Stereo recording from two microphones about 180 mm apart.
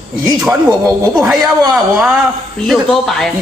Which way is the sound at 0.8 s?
15° right (ahead or behind).